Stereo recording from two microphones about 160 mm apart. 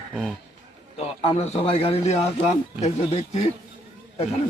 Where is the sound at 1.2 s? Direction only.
35° left (ahead or behind).